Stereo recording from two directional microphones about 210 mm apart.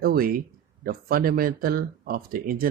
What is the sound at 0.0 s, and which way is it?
Speech, 45° right (ahead or behind).